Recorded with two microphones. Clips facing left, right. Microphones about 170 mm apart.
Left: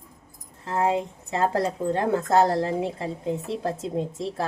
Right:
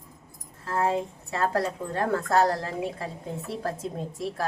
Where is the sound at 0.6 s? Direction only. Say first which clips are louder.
Left 2 dB; 20° left (ahead or behind).